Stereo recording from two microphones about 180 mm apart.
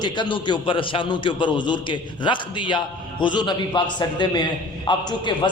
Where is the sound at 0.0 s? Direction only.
25° left (ahead or behind).